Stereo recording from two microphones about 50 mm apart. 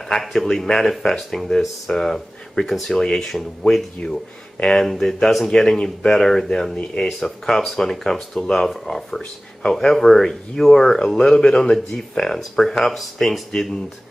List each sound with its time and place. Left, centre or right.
0.1 s speech: centre
4.8 s speech: centre